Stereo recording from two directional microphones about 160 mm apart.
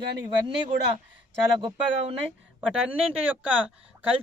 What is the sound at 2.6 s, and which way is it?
Speech, 5° right (ahead or behind).